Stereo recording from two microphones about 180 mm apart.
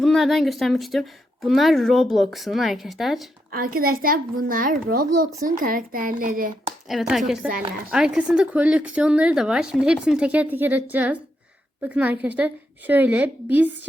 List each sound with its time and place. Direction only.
0.0 s speech: centre (ahead or behind)
3.5 s a child's voice: 55° right (ahead or behind)
6.8 s a woman's voice: centre (ahead or behind)